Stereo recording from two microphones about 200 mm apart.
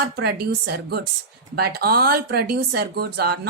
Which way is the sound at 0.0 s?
50° right (ahead or behind).